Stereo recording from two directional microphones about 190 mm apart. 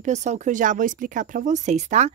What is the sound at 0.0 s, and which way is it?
A woman's voice, 40° right (ahead or behind).